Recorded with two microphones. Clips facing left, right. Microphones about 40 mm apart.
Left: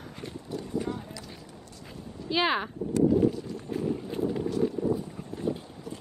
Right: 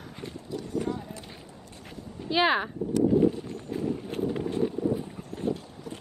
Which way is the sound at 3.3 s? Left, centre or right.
Right.